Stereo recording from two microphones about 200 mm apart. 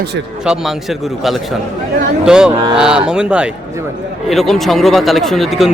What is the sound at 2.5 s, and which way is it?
Speech, 25° right (ahead or behind).